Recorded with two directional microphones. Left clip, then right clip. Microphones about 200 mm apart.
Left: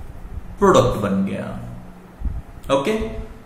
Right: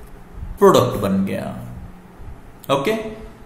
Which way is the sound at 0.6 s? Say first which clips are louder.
Right 1 dB; 45° right (ahead or behind).